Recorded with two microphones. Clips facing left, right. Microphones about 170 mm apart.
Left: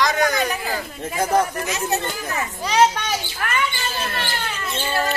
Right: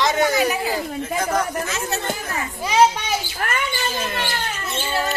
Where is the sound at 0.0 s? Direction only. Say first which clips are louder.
Right 1 dB; 25° right (ahead or behind).